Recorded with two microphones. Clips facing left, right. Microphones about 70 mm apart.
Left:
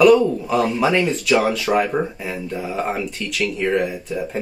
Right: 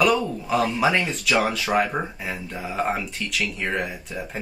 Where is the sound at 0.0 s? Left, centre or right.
Centre.